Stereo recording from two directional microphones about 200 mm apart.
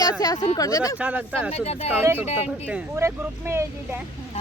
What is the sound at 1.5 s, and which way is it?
Speech, 30° left (ahead or behind).